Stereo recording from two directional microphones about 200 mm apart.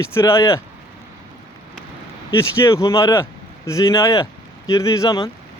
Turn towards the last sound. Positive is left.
turn(degrees=15)  # may be behind; listen again after turning